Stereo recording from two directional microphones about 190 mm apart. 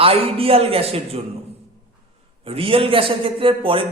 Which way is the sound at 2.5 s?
30° right (ahead or behind).